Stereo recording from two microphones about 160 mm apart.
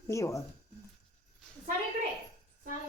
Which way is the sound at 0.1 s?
20° left (ahead or behind).